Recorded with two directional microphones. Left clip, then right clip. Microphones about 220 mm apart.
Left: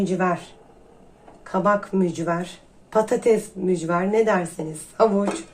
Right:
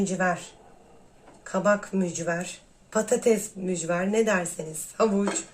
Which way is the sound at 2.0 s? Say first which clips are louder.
Left 5 dB; 30° left (ahead or behind).